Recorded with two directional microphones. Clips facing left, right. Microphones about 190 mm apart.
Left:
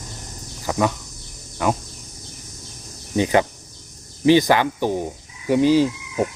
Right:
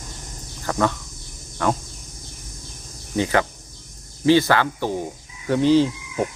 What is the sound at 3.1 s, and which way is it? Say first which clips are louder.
Speech: left 3 dB; 20° left (ahead or behind).